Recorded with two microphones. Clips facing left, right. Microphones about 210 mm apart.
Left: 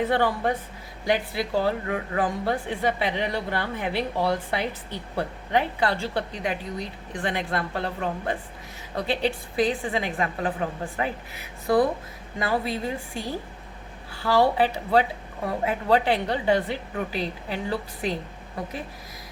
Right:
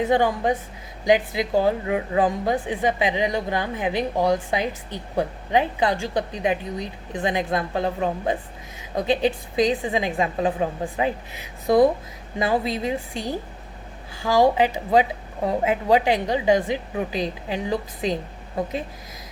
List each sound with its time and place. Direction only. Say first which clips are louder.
0.0 s a woman's voice: right 3 dB; 15° right (ahead or behind)